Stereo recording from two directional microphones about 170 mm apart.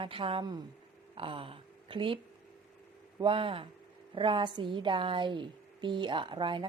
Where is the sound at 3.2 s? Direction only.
30° right (ahead or behind).